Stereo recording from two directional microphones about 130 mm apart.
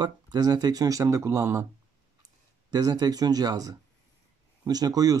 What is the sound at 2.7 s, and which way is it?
Speech, 30° right (ahead or behind).